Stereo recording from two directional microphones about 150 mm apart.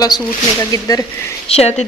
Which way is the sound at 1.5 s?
45° left (ahead or behind).